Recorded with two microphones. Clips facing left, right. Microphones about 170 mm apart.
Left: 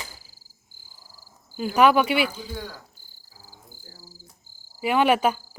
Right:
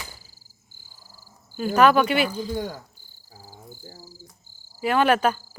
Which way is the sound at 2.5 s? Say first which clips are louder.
Right 7 dB; 45° right (ahead or behind).